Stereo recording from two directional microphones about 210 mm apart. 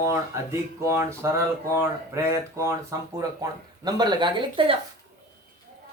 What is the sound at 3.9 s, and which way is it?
Speech, 20° right (ahead or behind).